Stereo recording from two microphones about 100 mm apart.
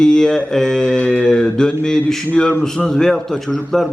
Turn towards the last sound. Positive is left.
turn(degrees=5)  # may be behind; listen again after turning